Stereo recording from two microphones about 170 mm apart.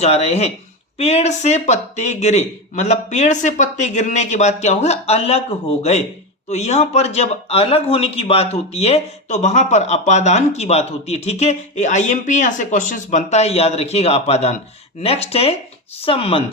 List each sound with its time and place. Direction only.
0.0 s speech: 40° left (ahead or behind)